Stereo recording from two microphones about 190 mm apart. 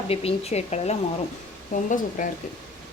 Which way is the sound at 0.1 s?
30° left (ahead or behind).